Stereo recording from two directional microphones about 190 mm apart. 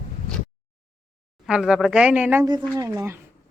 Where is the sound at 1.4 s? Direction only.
5° right (ahead or behind).